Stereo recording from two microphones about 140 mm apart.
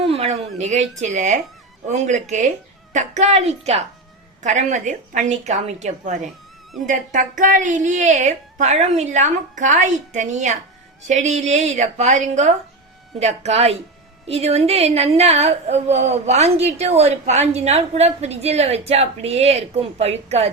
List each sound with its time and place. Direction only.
0.0 s a sound: 50° right (ahead or behind)
0.6 s a woman's voice: 55° right (ahead or behind)
4.4 s a woman's voice: 60° right (ahead or behind)